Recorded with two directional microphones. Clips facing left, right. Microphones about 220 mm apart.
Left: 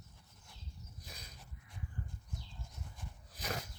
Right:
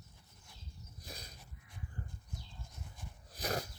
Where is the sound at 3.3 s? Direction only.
35° right (ahead or behind).